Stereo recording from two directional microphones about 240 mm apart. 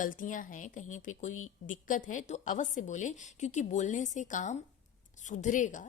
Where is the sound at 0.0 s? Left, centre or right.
Left.